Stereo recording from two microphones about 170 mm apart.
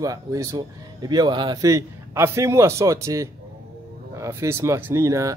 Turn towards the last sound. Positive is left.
turn(degrees=-20)  # may be behind; listen again after turning